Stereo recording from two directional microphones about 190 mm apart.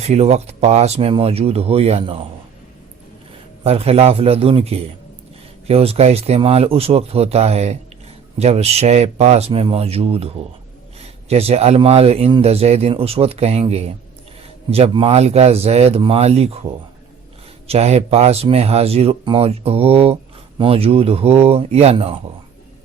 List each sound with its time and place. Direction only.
0.0 s speech: 35° right (ahead or behind)
3.6 s speech: 30° right (ahead or behind)
17.7 s speech: 35° right (ahead or behind)